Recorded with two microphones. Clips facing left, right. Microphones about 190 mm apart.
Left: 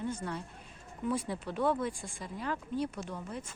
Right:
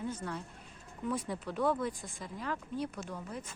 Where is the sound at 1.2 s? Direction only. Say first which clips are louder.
Left 1 dB; centre (ahead or behind).